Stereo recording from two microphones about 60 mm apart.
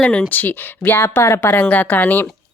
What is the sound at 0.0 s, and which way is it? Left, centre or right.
Speech, centre.